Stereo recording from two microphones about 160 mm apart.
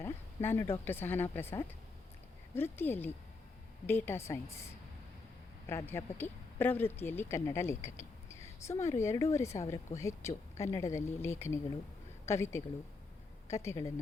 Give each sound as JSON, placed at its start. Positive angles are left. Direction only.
{"t": 0.0, "sound": "a sound", "side_deg": 15}
{"t": 0.9, "sound": "speech", "side_deg": 15}
{"t": 5.6, "sound": "speech", "side_deg": 15}